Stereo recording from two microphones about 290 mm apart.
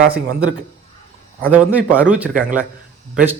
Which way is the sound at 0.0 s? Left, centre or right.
Right.